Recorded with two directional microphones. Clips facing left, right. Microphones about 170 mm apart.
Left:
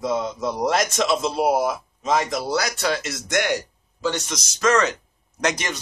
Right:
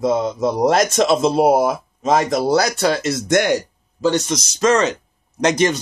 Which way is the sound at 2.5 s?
35° right (ahead or behind).